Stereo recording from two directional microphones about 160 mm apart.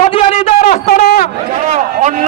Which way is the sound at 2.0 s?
55° right (ahead or behind).